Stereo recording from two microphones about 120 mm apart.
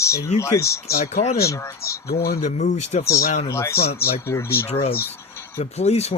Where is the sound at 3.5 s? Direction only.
25° left (ahead or behind).